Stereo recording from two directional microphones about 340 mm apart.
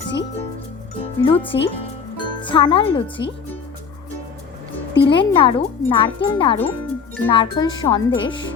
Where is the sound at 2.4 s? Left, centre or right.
Centre.